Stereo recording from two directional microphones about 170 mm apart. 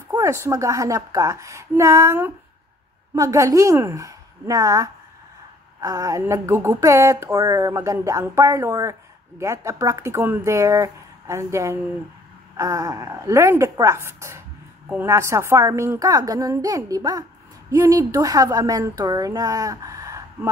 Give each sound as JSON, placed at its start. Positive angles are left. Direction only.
{"t": 0.1, "sound": "speech", "side_deg": -15}